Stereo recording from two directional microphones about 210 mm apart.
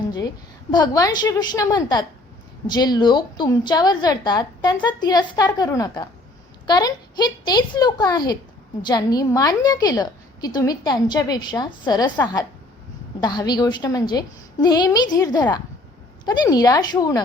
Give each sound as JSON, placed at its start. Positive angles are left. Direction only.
{"t": 0.7, "sound": "a woman's voice", "side_deg": 20}